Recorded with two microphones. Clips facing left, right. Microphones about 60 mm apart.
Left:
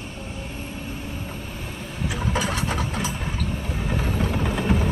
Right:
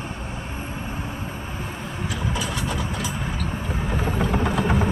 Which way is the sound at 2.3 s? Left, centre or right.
Left.